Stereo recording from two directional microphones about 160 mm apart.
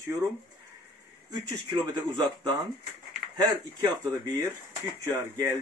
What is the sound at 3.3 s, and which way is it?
Speech, 25° right (ahead or behind).